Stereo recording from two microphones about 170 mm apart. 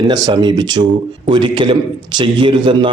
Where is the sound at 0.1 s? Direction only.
25° right (ahead or behind).